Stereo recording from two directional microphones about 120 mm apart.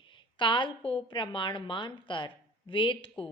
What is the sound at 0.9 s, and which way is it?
A woman's voice, 45° left (ahead or behind).